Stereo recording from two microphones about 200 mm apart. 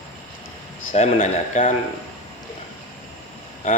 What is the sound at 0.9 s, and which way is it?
Speech, 40° left (ahead or behind).